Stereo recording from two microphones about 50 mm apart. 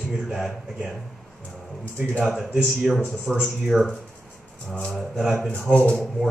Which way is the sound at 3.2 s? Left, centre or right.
Right.